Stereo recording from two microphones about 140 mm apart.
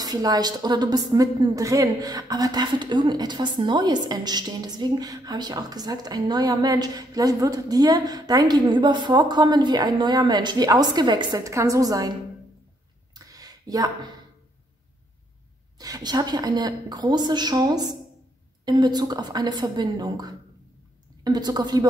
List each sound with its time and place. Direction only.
0.0 s a woman's voice: 25° right (ahead or behind)
13.1 s a sound: 25° right (ahead or behind)
15.8 s a woman's voice: 30° right (ahead or behind)